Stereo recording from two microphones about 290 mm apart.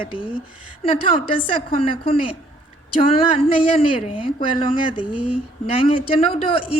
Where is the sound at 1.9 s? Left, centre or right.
Centre.